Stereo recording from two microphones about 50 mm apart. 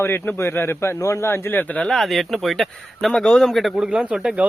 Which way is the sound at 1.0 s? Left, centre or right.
Left.